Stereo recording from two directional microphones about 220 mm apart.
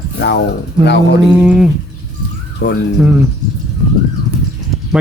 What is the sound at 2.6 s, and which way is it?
Speech, 50° left (ahead or behind).